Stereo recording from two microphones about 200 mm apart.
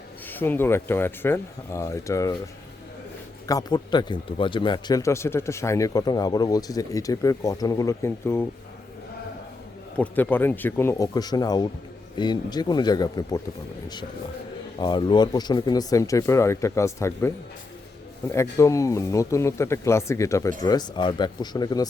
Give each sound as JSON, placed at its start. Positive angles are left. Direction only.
{"t": 0.3, "sound": "a man's voice", "side_deg": 10}
{"t": 3.4, "sound": "a man's voice", "side_deg": 20}
{"t": 10.0, "sound": "a man's voice", "side_deg": 10}
{"t": 14.8, "sound": "a man's voice", "side_deg": 20}